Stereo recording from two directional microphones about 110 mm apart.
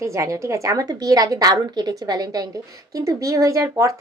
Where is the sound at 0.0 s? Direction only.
25° right (ahead or behind).